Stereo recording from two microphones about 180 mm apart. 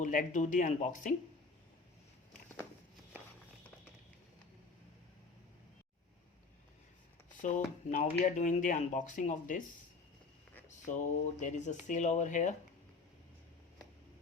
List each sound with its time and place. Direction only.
0.0 s speech: 45° left (ahead or behind)
7.4 s speech: 45° left (ahead or behind)
10.7 s speech: 45° left (ahead or behind)